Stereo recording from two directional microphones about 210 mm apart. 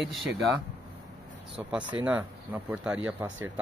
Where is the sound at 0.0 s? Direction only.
Centre (ahead or behind).